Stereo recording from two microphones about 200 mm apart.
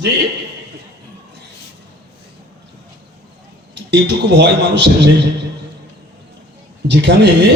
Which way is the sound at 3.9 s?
60° right (ahead or behind).